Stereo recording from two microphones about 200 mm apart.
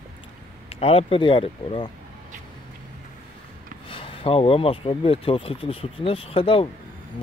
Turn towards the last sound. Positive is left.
turn(degrees=25)  # may be behind; listen again after turning